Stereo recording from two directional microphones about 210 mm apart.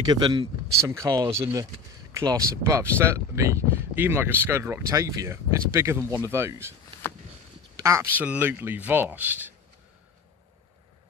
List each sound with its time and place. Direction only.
0.0 s speech: 20° right (ahead or behind)
7.8 s speech: 15° right (ahead or behind)